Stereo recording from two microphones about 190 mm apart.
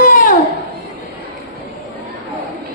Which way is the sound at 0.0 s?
45° left (ahead or behind).